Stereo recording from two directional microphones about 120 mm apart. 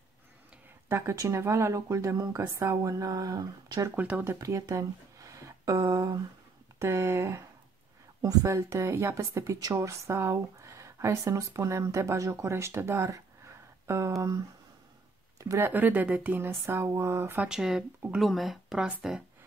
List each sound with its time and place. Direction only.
0.8 s speech: 25° right (ahead or behind)
3.9 s speech: 15° right (ahead or behind)
15.7 s speech: 15° right (ahead or behind)
17.5 s speech: 5° right (ahead or behind)